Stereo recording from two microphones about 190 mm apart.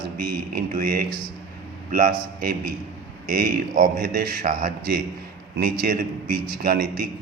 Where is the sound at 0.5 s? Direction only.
50° right (ahead or behind).